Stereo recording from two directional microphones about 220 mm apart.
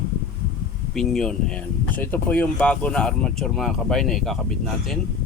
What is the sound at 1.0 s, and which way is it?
A man's voice, centre (ahead or behind).